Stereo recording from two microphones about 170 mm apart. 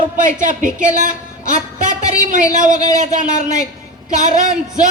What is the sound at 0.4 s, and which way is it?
A woman's voice, 50° right (ahead or behind).